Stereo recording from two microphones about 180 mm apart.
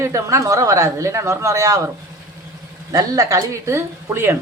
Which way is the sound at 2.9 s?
20° right (ahead or behind).